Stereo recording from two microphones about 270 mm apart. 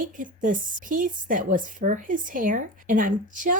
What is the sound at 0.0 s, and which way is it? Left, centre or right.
Speech, right.